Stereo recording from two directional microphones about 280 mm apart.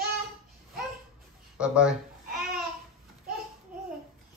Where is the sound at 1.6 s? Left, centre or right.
Centre.